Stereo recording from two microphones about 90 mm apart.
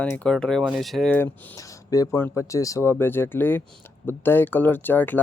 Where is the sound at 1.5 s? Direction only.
40° left (ahead or behind).